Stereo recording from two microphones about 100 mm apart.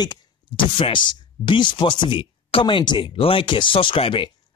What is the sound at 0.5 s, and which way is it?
Speech, 60° left (ahead or behind).